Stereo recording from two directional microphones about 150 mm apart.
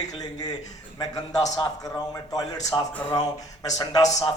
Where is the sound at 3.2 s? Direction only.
50° left (ahead or behind).